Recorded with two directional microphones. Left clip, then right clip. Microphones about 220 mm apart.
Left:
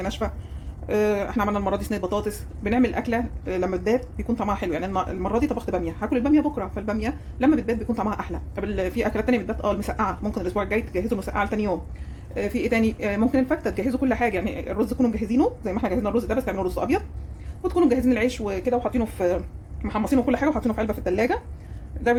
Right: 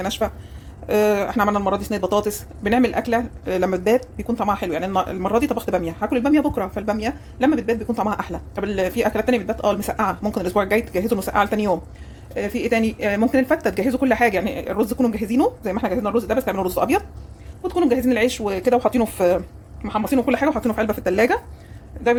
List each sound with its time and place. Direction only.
0.0 s speech: 10° right (ahead or behind)
17.6 s speech: 5° right (ahead or behind)
19.8 s speech: 5° right (ahead or behind)